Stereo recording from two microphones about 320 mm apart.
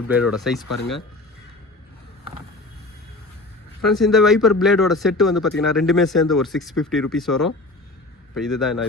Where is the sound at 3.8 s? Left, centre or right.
Centre.